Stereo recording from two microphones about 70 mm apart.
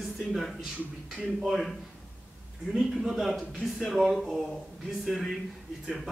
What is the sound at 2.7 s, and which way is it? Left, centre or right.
Speech, centre.